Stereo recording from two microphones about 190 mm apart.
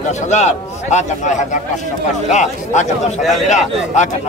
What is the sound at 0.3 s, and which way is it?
Speech, 35° left (ahead or behind).